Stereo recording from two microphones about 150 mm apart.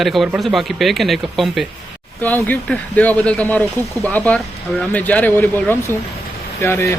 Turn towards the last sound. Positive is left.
turn(degrees=15)  # may be behind; listen again after turning